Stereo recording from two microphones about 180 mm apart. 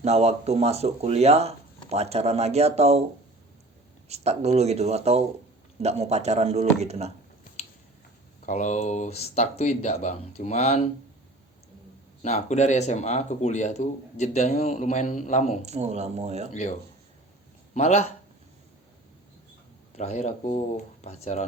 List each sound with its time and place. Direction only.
0.0 s speech: 35° right (ahead or behind)
4.1 s speech: 35° right (ahead or behind)
8.4 s speech: 40° left (ahead or behind)
12.2 s speech: 40° left (ahead or behind)
15.6 s speech: 40° right (ahead or behind)
16.5 s speech: 40° left (ahead or behind)
17.7 s speech: 35° left (ahead or behind)
20.0 s speech: 40° left (ahead or behind)